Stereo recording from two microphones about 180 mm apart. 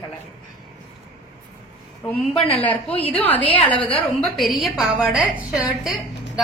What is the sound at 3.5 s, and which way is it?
Speech, 30° left (ahead or behind).